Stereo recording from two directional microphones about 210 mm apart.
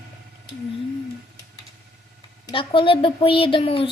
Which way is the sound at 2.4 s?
25° left (ahead or behind).